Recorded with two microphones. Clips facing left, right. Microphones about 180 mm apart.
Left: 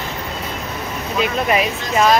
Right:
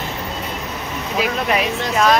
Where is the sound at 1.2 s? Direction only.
Centre (ahead or behind).